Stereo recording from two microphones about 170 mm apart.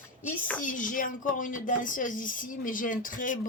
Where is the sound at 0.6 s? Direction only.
50° left (ahead or behind).